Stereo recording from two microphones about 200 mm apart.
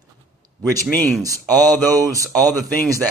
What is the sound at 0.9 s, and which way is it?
Speech, 10° left (ahead or behind).